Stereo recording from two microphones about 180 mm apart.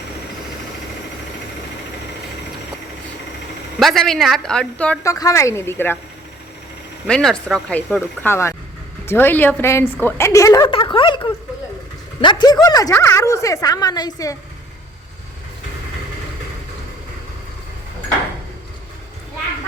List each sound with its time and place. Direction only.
3.8 s speech: centre (ahead or behind)
5.0 s a woman's voice: 20° left (ahead or behind)
7.1 s a woman's voice: 5° left (ahead or behind)
10.7 s a woman's voice: 30° left (ahead or behind)